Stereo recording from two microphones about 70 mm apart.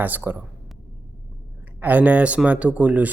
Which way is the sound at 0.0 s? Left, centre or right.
Right.